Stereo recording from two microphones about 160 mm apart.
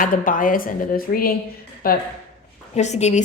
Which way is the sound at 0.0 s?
55° left (ahead or behind).